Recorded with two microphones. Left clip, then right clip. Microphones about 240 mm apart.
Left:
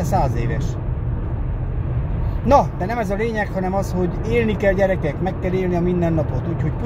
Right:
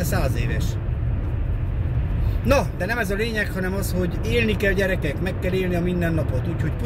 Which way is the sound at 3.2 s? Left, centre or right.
Right.